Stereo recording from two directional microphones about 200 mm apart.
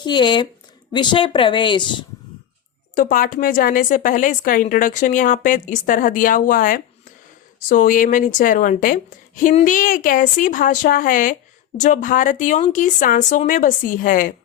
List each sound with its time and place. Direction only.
0.0 s a woman's voice: 20° left (ahead or behind)
2.9 s a woman's voice: 40° left (ahead or behind)